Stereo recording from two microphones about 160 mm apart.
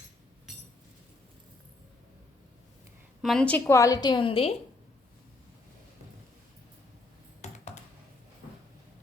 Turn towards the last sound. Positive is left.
turn(degrees=45)  # may be behind; listen again after turning